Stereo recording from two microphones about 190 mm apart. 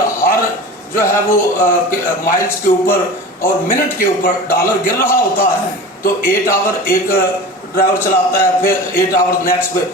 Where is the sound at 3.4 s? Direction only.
45° left (ahead or behind).